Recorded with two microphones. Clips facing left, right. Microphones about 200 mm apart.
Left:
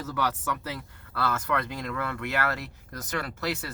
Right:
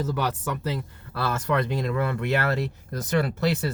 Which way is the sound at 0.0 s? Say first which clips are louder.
Right 3 dB; 20° right (ahead or behind).